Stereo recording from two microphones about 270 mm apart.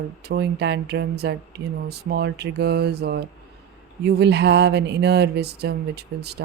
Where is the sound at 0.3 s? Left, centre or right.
Right.